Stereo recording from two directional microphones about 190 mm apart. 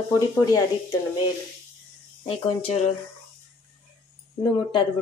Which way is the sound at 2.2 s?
30° left (ahead or behind).